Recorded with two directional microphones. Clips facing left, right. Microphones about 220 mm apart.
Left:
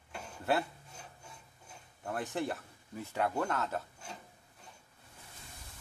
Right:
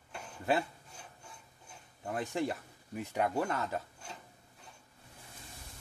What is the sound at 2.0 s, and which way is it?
Speech, 15° right (ahead or behind).